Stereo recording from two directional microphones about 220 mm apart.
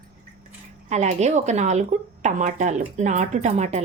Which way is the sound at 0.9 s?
30° right (ahead or behind).